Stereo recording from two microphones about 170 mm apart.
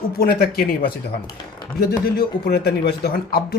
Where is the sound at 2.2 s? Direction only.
65° left (ahead or behind).